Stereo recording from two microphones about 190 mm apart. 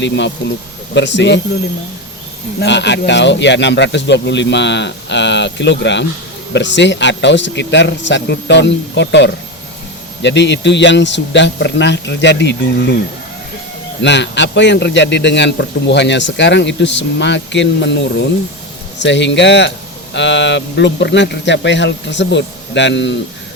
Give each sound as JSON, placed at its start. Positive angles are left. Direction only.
{"t": 0.9, "sound": "a man's voice", "side_deg": 70}
{"t": 2.6, "sound": "a man's voice", "side_deg": 65}
{"t": 14.0, "sound": "a man's voice", "side_deg": 70}